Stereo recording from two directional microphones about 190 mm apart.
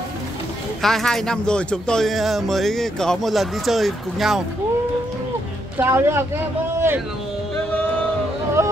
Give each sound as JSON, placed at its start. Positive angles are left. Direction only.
{"t": 0.8, "sound": "speech", "side_deg": 0}
{"t": 5.8, "sound": "speech", "side_deg": -15}
{"t": 8.6, "sound": "music", "side_deg": -15}